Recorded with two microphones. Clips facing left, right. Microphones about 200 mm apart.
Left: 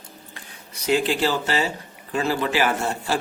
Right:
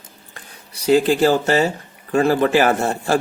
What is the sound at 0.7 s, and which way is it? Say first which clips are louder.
Speech: right 6 dB; 35° right (ahead or behind).